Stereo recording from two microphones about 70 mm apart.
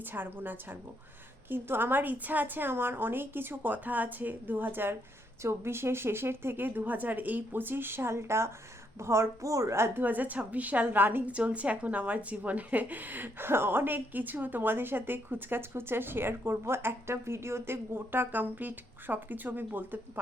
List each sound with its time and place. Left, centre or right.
0.0 s speech: right
10.0 s speech: right